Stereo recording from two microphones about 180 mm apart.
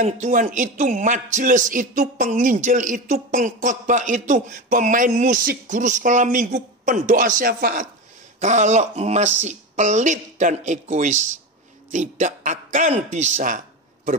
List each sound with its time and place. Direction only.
0.0 s a man's voice: 45° right (ahead or behind)